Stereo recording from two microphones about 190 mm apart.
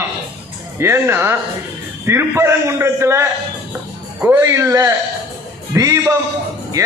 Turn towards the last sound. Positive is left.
turn(degrees=-15)  # may be behind; listen again after turning